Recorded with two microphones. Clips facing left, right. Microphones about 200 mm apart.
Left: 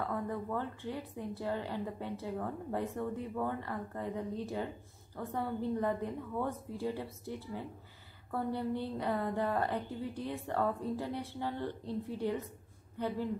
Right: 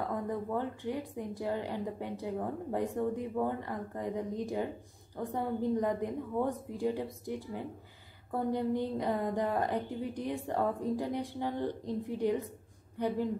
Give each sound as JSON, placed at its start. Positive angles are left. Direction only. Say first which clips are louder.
{"t": 0.0, "sound": "a woman's voice", "louder": "right 2 dB", "side_deg": -15}